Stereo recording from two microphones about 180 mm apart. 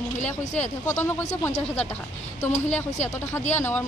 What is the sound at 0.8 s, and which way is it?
Speech, 15° left (ahead or behind).